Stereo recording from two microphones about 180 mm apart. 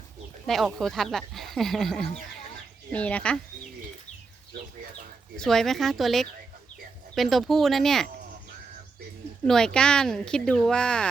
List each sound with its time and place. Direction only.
0.4 s speech: centre (ahead or behind)
5.4 s speech: centre (ahead or behind)
9.5 s speech: 5° left (ahead or behind)